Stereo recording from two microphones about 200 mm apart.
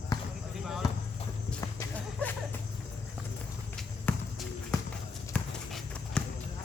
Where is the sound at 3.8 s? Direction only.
Centre (ahead or behind).